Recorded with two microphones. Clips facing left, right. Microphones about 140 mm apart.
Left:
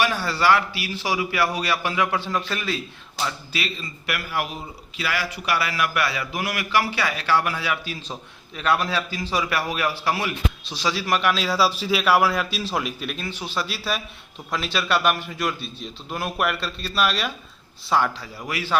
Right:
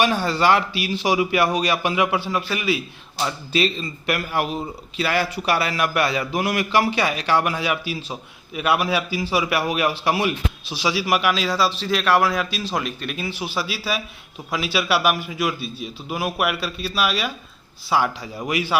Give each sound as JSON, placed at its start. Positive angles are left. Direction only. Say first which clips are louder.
{"t": 0.0, "sound": "a man's voice", "louder": "right 3 dB", "side_deg": -20}
{"t": 3.2, "sound": "a man's voice", "louder": "right 8 dB", "side_deg": -25}
{"t": 10.7, "sound": "a man's voice", "louder": "right 3 dB", "side_deg": -10}
{"t": 13.1, "sound": "a man's voice", "louder": "right 2 dB", "side_deg": -10}
{"t": 18.3, "sound": "a man's voice", "louder": "right 3 dB", "side_deg": -20}